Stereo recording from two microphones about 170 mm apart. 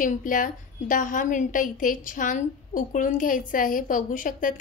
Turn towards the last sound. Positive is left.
turn(degrees=55)  # may be behind; listen again after turning